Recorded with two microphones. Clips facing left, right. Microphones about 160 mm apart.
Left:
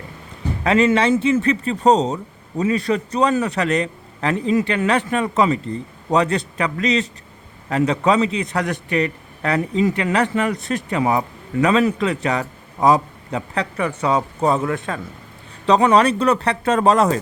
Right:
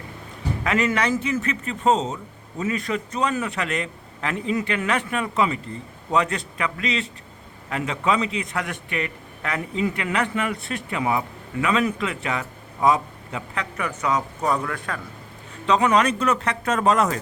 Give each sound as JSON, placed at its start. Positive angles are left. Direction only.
{"t": 0.6, "sound": "a man's voice", "side_deg": 30}
{"t": 15.6, "sound": "a man's voice", "side_deg": 35}